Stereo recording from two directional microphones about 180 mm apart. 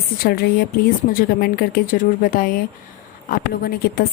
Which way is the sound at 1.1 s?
55° left (ahead or behind).